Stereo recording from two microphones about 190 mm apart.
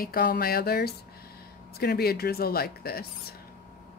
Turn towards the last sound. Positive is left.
turn(degrees=55)  # may be behind; listen again after turning